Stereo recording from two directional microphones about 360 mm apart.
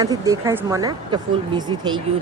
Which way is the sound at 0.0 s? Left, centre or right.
Centre.